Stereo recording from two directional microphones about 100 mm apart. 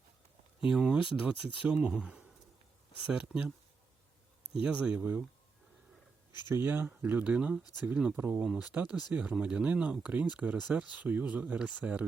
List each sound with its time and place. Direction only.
0.7 s speech: 5° right (ahead or behind)
4.6 s speech: 10° right (ahead or behind)
6.5 s speech: 25° right (ahead or behind)